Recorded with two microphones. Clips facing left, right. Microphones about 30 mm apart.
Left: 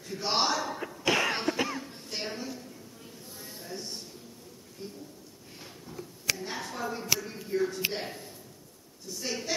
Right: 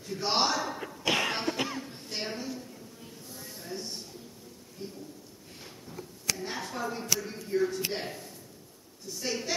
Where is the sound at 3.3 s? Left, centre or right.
Centre.